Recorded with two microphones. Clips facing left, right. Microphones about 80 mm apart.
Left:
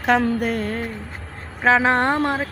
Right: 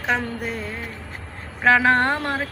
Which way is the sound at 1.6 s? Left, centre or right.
Left.